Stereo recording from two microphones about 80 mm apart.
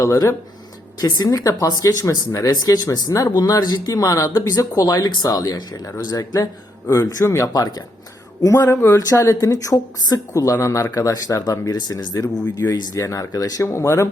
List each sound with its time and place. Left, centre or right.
0.0 s a woman's voice: left
2.5 s speech: left
8.4 s a woman's voice: left
13.0 s speech: left
13.7 s a woman's voice: left